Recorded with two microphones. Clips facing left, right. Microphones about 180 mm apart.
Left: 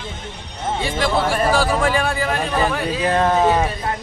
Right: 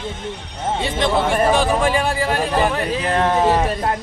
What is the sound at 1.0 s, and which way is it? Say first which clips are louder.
Speech: right 2 dB; 20° right (ahead or behind).